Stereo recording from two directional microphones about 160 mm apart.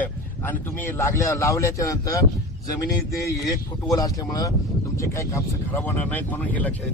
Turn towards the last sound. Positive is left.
turn(degrees=10)  # may be behind; listen again after turning